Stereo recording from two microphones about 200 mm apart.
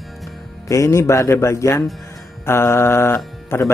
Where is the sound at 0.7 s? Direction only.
15° left (ahead or behind).